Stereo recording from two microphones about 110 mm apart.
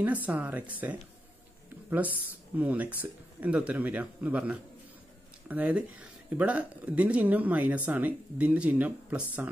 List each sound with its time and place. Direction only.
0.0 s speech: 15° right (ahead or behind)
2.6 s speech: 15° right (ahead or behind)